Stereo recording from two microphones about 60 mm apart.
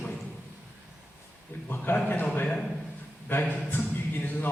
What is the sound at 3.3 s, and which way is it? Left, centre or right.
A man's voice, left.